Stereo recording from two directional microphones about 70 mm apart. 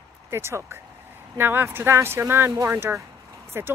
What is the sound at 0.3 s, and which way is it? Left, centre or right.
A woman's voice, right.